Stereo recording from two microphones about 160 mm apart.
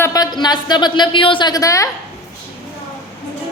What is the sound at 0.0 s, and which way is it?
A woman's voice, 25° left (ahead or behind).